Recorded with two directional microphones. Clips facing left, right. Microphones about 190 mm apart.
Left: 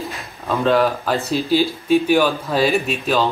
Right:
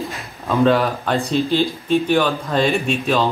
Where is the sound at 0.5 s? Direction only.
Centre (ahead or behind).